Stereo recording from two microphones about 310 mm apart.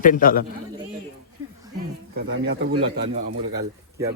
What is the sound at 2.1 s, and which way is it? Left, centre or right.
Speech, right.